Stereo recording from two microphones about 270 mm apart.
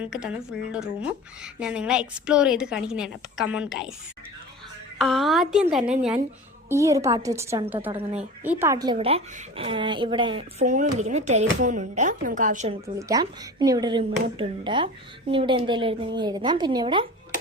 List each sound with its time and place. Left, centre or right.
0.0 s a woman's voice: centre
4.9 s a woman's voice: centre; by 12.7 s right
13.0 s speech: centre